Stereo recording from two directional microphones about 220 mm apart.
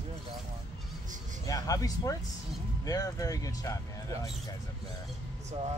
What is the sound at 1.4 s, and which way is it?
Music, 15° left (ahead or behind).